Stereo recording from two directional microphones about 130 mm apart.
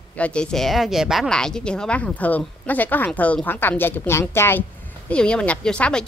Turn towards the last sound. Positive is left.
turn(degrees=10)  # may be behind; listen again after turning